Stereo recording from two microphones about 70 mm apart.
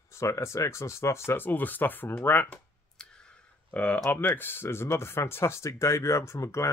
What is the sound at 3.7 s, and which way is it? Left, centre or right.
Speech, centre.